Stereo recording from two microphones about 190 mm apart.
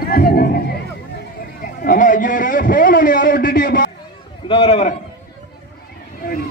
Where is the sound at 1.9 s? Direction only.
45° left (ahead or behind).